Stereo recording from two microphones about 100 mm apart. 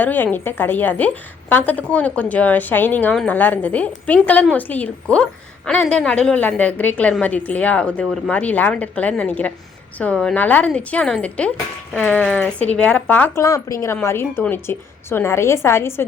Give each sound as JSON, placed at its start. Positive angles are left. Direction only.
{"t": 0.0, "sound": "a woman's voice", "side_deg": 15}
{"t": 13.4, "sound": "a woman's voice", "side_deg": 30}